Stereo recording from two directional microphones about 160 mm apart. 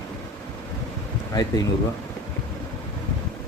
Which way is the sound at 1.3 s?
25° left (ahead or behind).